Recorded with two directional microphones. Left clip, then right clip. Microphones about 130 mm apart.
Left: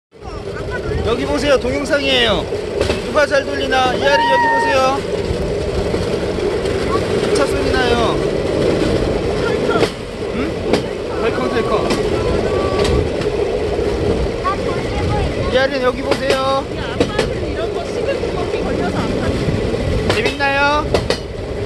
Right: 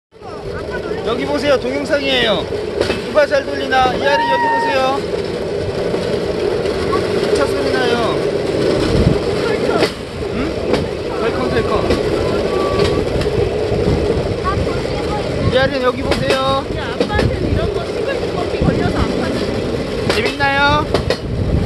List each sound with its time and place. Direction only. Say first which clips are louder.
1.3 s speech: even; 25° left (ahead or behind)
4.6 s speech: left 1 dB; 35° left (ahead or behind)
7.3 s vehicle: left 1 dB; 25° left (ahead or behind)
11.2 s vehicle: even; 5° left (ahead or behind)
15.5 s speech: even; 5° right (ahead or behind)
20.2 s vehicle: right 1 dB; 20° right (ahead or behind)